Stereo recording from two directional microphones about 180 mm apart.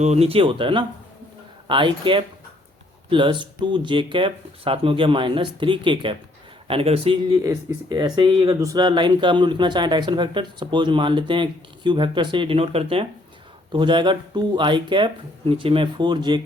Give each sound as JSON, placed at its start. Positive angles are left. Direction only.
{"t": 0.0, "sound": "speech", "side_deg": -35}
{"t": 7.4, "sound": "speech", "side_deg": -20}